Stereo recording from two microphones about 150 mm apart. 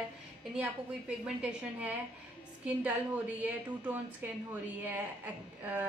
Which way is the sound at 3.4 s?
10° right (ahead or behind).